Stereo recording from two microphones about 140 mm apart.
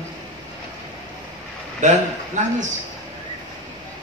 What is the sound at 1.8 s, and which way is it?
Speech, 60° right (ahead or behind).